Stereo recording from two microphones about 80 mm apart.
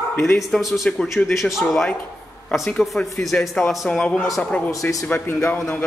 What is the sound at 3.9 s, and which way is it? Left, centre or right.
Speech, centre.